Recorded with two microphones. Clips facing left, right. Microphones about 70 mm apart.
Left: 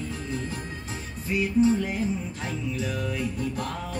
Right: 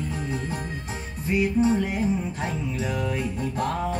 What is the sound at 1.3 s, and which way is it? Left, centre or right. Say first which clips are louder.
Music: right 1 dB; right.